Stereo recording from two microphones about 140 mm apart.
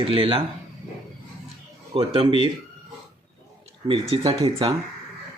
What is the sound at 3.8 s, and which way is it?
Speech, 40° right (ahead or behind).